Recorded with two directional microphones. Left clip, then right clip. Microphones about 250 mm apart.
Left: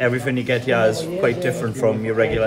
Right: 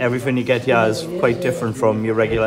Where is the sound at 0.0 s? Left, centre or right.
Centre.